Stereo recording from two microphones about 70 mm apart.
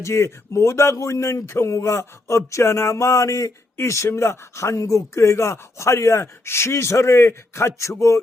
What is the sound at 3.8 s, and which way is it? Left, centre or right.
A man's voice, left.